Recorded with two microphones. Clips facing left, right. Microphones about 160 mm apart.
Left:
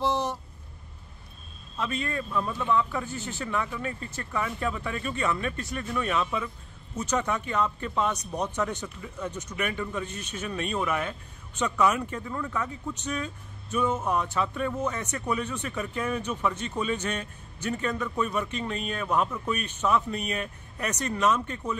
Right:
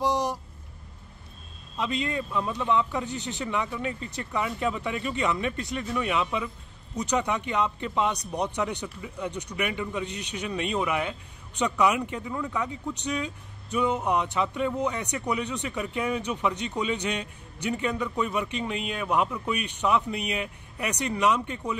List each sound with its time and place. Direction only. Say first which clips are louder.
0.0 s vehicle: right 1 dB; 15° right (ahead or behind)
1.8 s speech: right 2 dB; 15° right (ahead or behind)